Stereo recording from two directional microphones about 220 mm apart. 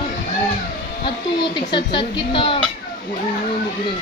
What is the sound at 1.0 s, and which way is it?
Speech, 20° left (ahead or behind).